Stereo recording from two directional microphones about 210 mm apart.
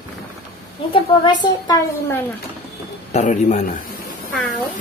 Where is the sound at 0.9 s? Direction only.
20° left (ahead or behind).